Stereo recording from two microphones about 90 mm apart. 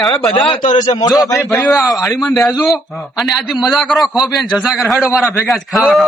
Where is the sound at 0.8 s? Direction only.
40° left (ahead or behind).